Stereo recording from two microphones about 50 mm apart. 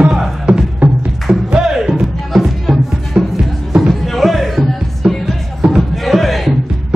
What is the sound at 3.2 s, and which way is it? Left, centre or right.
Music, right.